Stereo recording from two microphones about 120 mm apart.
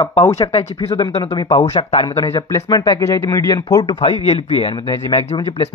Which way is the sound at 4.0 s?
55° left (ahead or behind).